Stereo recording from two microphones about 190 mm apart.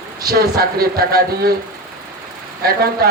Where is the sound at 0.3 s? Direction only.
55° right (ahead or behind).